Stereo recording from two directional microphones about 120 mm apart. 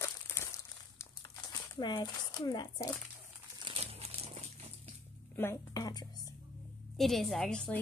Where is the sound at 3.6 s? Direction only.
50° right (ahead or behind).